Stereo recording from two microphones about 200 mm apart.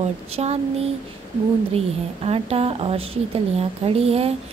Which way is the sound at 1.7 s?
30° right (ahead or behind).